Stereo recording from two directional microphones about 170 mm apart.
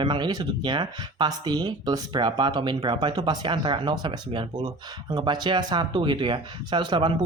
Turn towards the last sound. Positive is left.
turn(degrees=-25)  # may be behind; listen again after turning